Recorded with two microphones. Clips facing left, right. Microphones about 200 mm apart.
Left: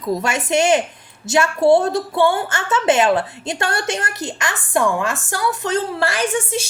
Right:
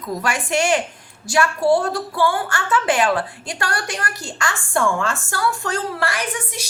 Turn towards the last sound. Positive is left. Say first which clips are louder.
# left 7 dB
turn(degrees=25)  # may be behind; listen again after turning